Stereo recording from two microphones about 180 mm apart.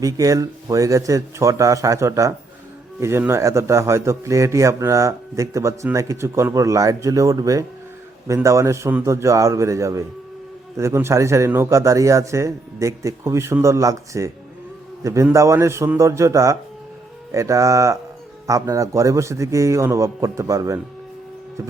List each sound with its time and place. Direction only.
0.0 s a man's voice: 20° right (ahead or behind)